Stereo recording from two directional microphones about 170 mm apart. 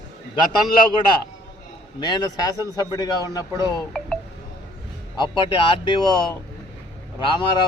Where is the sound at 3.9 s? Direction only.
5° left (ahead or behind).